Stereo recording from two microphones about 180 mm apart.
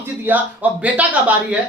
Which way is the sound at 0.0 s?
10° right (ahead or behind).